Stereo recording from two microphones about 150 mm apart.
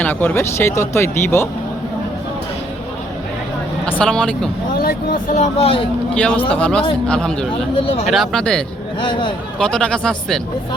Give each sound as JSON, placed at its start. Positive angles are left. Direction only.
{"t": 0.0, "sound": "speech", "side_deg": 10}
{"t": 3.9, "sound": "speech", "side_deg": 5}
{"t": 4.8, "sound": "speech", "side_deg": 75}
{"t": 5.5, "sound": "speech", "side_deg": 40}
{"t": 6.1, "sound": "speech", "side_deg": 10}
{"t": 7.8, "sound": "speech", "side_deg": 40}
{"t": 8.1, "sound": "speech", "side_deg": 0}